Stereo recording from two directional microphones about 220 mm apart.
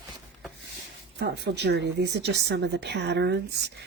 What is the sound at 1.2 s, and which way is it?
Speech, 50° right (ahead or behind).